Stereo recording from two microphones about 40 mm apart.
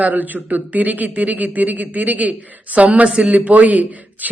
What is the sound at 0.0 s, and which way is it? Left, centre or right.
Speech, right.